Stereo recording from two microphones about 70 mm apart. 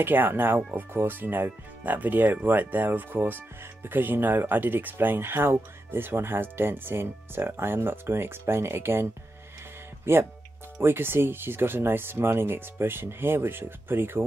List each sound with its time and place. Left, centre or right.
0.0 s speech: right